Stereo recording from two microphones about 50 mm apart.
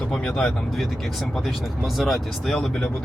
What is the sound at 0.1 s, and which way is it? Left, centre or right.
Speech, centre.